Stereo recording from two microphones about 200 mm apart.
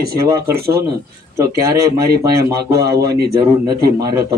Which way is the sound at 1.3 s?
15° right (ahead or behind).